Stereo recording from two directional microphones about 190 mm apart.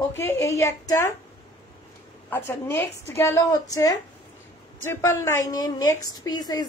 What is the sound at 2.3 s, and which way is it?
A woman's voice, 10° left (ahead or behind).